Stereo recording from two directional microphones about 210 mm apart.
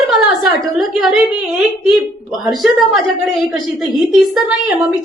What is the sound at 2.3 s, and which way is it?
A woman's voice, centre (ahead or behind).